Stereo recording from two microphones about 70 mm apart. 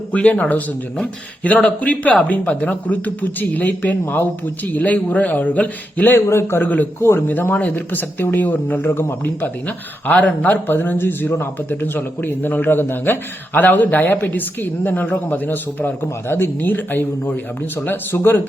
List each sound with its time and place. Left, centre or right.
0.1 s a man's voice: centre
1.6 s a man's voice: centre
6.1 s speech: left
6.6 s a man's voice: left